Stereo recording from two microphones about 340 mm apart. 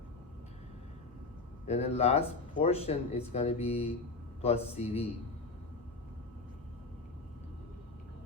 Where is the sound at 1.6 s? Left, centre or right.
Centre.